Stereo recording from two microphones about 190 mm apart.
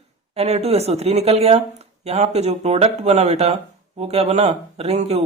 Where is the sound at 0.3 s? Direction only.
35° right (ahead or behind).